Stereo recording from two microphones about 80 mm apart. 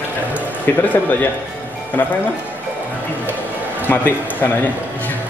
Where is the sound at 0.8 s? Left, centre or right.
Left.